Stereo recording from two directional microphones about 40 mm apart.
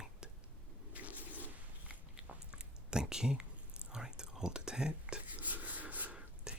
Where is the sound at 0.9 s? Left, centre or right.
Right.